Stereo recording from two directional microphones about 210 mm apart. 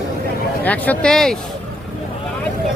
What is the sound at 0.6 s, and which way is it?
Speech, 5° left (ahead or behind).